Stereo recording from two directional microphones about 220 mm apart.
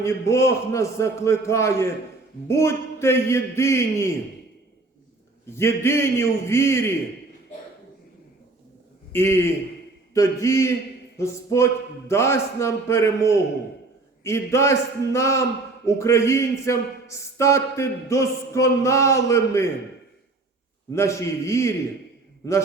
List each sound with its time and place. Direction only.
0.0 s speech: 15° left (ahead or behind)
5.5 s speech: 10° left (ahead or behind)
9.1 s speech: 10° left (ahead or behind)
20.9 s speech: 15° left (ahead or behind)